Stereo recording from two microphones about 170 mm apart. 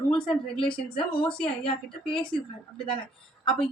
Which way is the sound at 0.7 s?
30° left (ahead or behind).